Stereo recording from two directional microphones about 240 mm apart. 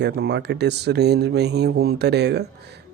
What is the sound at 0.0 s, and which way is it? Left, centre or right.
Speech, right.